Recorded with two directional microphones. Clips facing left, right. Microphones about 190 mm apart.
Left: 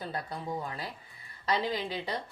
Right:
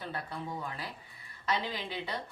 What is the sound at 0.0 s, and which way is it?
Speech, 35° left (ahead or behind).